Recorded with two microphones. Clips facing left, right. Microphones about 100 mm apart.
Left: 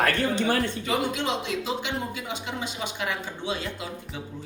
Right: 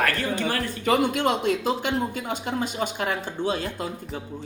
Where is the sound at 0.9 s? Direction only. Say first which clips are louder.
Right 9 dB; 55° right (ahead or behind).